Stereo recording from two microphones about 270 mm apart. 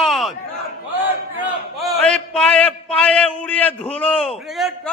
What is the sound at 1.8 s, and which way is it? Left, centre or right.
A man's voice, centre.